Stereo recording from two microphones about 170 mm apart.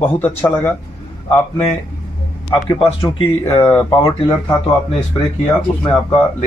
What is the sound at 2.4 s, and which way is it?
Speech, 25° left (ahead or behind).